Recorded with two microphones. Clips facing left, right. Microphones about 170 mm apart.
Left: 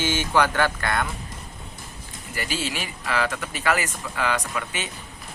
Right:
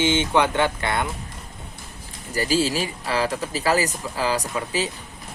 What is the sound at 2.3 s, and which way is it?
Speech, 35° right (ahead or behind).